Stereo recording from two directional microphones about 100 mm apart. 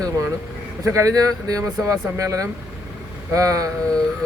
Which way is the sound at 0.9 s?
35° right (ahead or behind).